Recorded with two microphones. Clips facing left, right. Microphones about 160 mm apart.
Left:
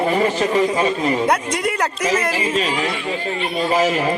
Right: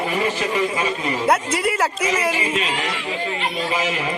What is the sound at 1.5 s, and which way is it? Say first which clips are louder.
Speech: even; 5° right (ahead or behind).